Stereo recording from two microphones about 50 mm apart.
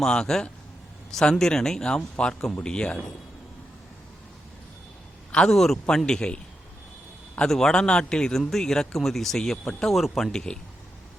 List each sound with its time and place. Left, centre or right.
0.0 s a man's voice: centre
5.5 s a man's voice: centre
7.4 s a man's voice: centre
10.3 s a man's voice: centre